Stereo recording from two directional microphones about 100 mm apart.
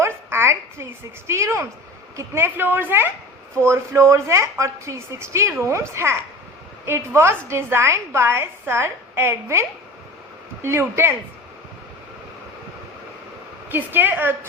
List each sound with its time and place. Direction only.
0.0 s a sound: 25° right (ahead or behind)
1.3 s a woman's voice: 30° right (ahead or behind)
13.7 s a woman's voice: 20° right (ahead or behind)